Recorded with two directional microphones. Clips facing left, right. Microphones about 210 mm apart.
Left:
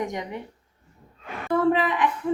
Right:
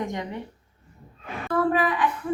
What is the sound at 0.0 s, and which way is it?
Speech, 15° left (ahead or behind).